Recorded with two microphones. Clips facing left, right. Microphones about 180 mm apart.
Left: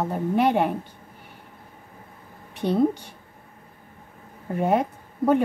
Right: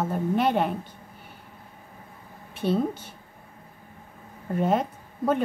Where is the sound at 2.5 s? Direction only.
15° left (ahead or behind).